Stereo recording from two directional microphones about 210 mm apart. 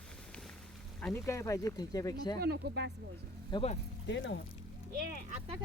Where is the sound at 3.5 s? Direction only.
25° left (ahead or behind).